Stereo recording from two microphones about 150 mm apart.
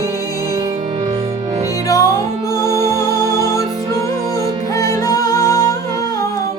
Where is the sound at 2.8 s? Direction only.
20° left (ahead or behind).